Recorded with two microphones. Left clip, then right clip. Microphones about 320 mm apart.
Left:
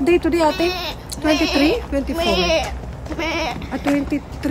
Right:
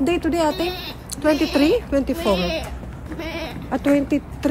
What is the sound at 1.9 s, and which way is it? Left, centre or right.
Speech, centre.